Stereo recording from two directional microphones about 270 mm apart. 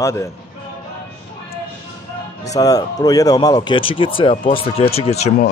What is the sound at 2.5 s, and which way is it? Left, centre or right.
Speech, centre.